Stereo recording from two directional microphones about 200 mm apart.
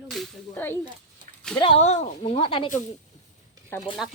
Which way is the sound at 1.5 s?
30° left (ahead or behind).